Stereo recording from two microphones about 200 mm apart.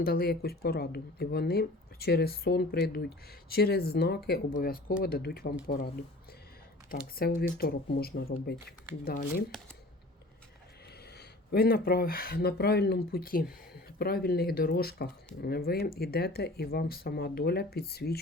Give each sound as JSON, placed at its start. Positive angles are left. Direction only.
{"t": 0.0, "sound": "speech", "side_deg": 50}
{"t": 6.9, "sound": "speech", "side_deg": 45}
{"t": 11.2, "sound": "speech", "side_deg": 50}